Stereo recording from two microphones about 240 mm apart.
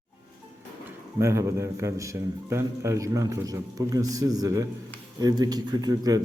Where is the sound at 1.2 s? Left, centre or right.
Centre.